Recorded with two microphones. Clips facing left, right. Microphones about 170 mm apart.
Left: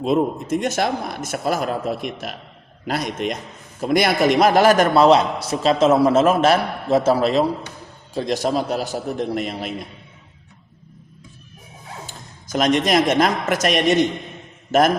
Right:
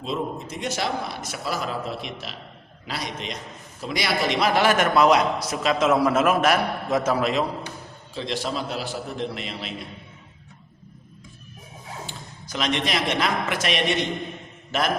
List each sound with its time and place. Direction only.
0.0 s a man's voice: 50° left (ahead or behind)
12.0 s a man's voice: 45° left (ahead or behind)